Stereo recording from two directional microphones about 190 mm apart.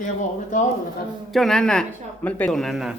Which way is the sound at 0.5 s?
40° left (ahead or behind).